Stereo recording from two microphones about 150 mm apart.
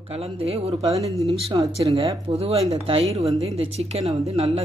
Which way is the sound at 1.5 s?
30° right (ahead or behind).